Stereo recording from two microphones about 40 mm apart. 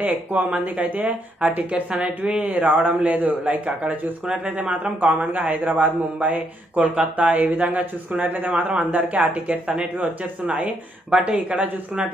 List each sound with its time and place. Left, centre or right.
0.0 s speech: right
1.7 s a woman's voice: right
2.4 s speech: right
5.0 s speech: right
8.5 s speech: right
11.1 s a woman's voice: centre
11.3 s speech: right